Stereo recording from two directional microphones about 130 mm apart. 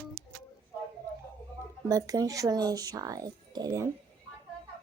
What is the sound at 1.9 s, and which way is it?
Speech, 25° right (ahead or behind).